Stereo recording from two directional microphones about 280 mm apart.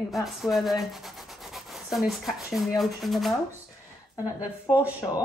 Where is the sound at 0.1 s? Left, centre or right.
Centre.